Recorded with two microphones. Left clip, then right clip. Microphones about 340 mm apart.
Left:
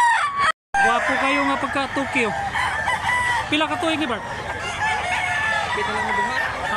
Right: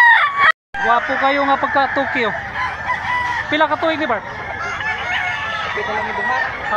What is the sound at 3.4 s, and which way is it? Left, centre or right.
Speech, centre.